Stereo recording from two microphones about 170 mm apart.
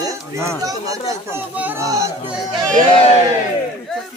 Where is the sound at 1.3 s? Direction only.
10° right (ahead or behind).